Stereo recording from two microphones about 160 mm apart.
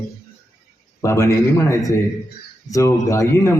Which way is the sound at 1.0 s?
15° left (ahead or behind).